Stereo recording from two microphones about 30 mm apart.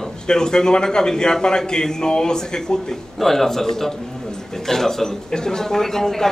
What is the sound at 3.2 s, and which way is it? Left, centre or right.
Speech, centre.